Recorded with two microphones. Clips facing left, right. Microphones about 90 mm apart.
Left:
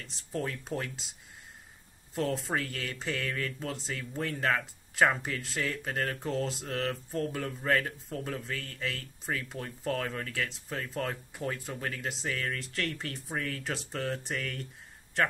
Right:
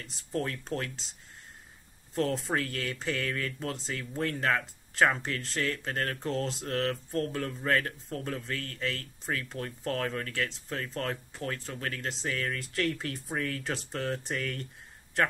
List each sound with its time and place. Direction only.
0.0 s speech: centre (ahead or behind)
2.1 s speech: centre (ahead or behind)